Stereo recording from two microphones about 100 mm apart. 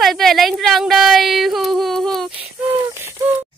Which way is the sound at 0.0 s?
Centre (ahead or behind).